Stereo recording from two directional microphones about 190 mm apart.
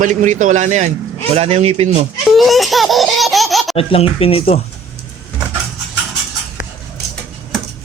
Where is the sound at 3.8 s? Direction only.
30° left (ahead or behind).